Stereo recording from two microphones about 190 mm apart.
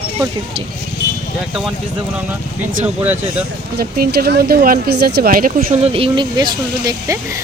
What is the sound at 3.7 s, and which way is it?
Speech, 55° right (ahead or behind).